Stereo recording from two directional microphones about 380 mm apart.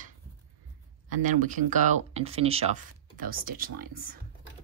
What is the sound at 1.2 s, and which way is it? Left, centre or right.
Speech, centre.